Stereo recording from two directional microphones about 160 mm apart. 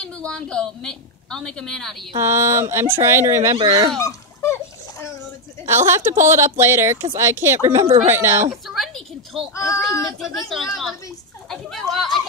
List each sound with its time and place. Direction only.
0.0 s a woman's voice: 5° left (ahead or behind)
2.1 s speech: 15° right (ahead or behind)
3.5 s speech: 30° right (ahead or behind)
4.0 s a sound: 20° left (ahead or behind)
5.9 s speech: 15° right (ahead or behind)
7.8 s speech: 40° right (ahead or behind)
8.1 s speech: 15° right (ahead or behind)
8.6 s a sound: centre (ahead or behind)
10.0 s a woman's voice: centre (ahead or behind)
11.4 s a sound: centre (ahead or behind)